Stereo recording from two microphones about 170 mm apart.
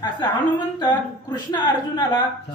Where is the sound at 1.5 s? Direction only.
25° left (ahead or behind).